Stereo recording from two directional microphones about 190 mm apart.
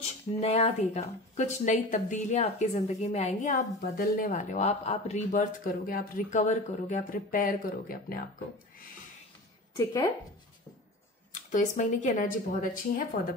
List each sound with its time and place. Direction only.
0.4 s a woman's voice: 35° left (ahead or behind); by 8.3 s 50° left (ahead or behind)
11.5 s a woman's voice: 40° left (ahead or behind)